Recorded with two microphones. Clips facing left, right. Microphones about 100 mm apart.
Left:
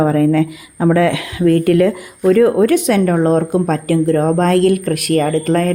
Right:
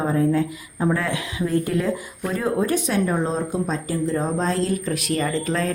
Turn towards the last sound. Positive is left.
turn(degrees=55)  # may be behind; listen again after turning